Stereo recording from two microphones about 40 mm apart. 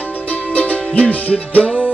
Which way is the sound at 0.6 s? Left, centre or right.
Left.